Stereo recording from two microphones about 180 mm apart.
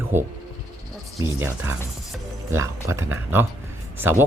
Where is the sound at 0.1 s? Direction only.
15° right (ahead or behind).